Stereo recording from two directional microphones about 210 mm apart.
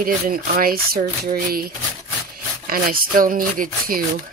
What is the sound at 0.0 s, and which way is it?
Speech, 45° right (ahead or behind).